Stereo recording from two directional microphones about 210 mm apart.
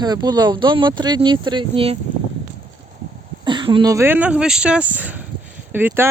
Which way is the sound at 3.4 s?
20° right (ahead or behind).